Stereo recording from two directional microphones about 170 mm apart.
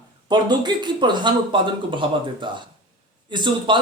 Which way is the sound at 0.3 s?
25° right (ahead or behind).